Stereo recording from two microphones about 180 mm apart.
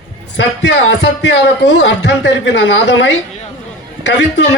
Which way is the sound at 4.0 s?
75° left (ahead or behind).